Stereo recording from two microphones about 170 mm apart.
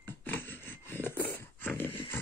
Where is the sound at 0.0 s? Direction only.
10° left (ahead or behind).